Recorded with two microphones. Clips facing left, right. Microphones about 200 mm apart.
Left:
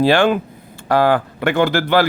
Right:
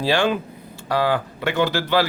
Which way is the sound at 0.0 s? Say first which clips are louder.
Left 6 dB; 55° left (ahead or behind).